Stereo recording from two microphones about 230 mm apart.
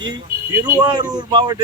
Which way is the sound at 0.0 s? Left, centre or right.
Centre.